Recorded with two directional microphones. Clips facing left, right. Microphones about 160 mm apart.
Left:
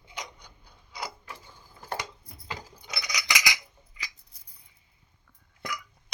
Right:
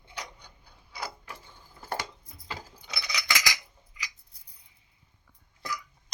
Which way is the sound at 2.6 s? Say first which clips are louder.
Left 1 dB; 10° left (ahead or behind).